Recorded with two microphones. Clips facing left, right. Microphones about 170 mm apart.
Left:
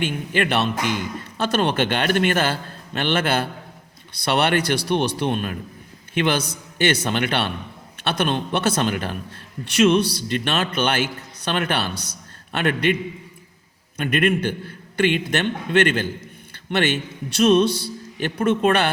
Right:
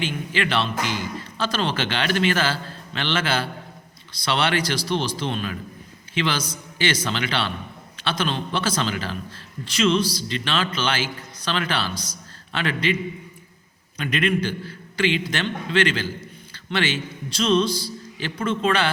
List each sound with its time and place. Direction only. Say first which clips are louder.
0.0 s speech: left 3 dB; 55° left (ahead or behind)